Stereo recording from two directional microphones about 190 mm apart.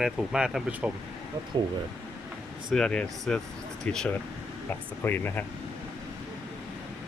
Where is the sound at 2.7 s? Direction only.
5° left (ahead or behind).